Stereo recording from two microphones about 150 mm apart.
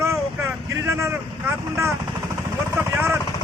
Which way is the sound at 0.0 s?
20° right (ahead or behind).